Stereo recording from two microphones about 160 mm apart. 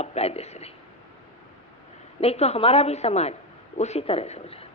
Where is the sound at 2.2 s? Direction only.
40° left (ahead or behind).